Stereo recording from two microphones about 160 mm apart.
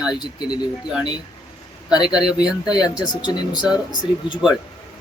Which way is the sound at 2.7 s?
25° left (ahead or behind).